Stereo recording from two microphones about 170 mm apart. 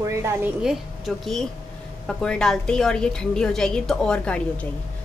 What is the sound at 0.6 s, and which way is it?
A woman's voice, centre (ahead or behind).